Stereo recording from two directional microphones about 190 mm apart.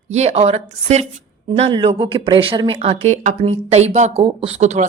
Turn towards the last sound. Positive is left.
turn(degrees=-35)  # may be behind; listen again after turning